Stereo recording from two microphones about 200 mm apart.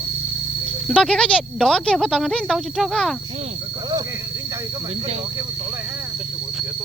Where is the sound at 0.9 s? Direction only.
5° left (ahead or behind).